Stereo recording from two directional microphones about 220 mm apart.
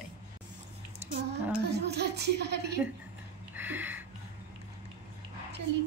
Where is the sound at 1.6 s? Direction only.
50° right (ahead or behind).